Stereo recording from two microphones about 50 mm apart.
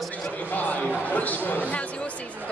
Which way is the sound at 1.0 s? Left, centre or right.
Left.